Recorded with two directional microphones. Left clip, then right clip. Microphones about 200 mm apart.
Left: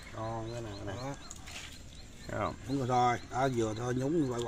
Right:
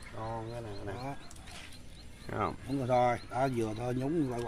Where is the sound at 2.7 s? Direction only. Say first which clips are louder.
Even; 15° right (ahead or behind).